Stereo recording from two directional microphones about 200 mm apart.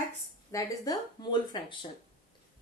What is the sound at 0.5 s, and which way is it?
Speech, 15° left (ahead or behind).